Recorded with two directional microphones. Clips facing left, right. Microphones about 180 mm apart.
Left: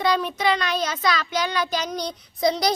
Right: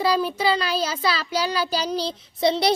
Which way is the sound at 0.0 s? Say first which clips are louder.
Right 1 dB; 30° right (ahead or behind).